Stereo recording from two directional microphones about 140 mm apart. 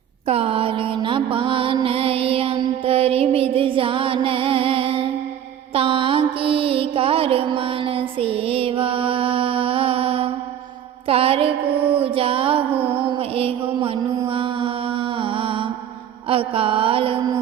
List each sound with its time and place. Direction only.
0.3 s music: 45° right (ahead or behind)
5.7 s mantra: 40° right (ahead or behind)
11.1 s music: 45° right (ahead or behind)
12.9 s mantra: 40° right (ahead or behind)